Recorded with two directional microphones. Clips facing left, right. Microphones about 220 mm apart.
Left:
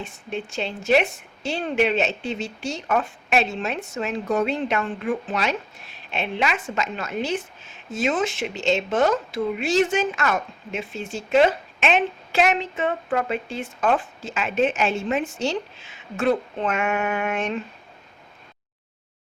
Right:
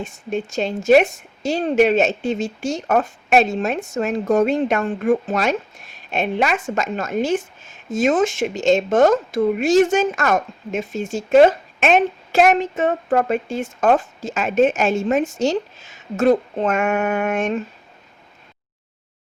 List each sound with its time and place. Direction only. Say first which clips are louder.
0.0 s speech: right 6 dB; 45° right (ahead or behind)